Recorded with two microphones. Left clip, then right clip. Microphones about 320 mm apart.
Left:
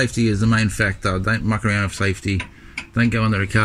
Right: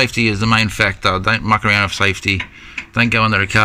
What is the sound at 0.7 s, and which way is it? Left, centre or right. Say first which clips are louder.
Speech: right 6 dB; right.